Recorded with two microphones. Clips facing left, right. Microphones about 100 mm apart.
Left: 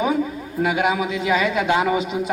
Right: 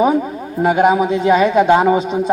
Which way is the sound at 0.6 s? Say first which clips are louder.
Right 7 dB; 40° right (ahead or behind).